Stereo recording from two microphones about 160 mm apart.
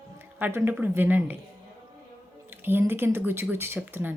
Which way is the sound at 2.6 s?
15° right (ahead or behind).